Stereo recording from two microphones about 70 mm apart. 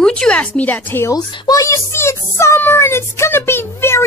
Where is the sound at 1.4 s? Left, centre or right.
Left.